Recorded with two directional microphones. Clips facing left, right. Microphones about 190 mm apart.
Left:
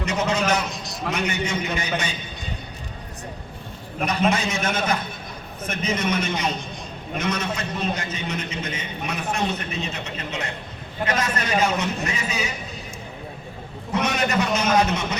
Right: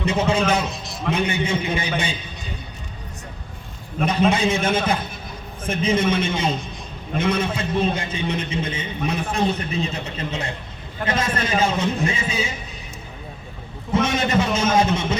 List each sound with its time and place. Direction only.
0.0 s a sound: 30° right (ahead or behind)
1.1 s a man's voice: 30° right (ahead or behind)
4.3 s a man's voice: 30° right (ahead or behind)
13.9 s a man's voice: 25° right (ahead or behind)